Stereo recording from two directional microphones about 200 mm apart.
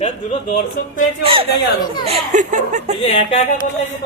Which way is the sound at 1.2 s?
30° right (ahead or behind).